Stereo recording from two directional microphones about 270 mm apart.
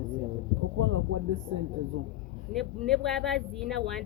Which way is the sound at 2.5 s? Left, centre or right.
Right.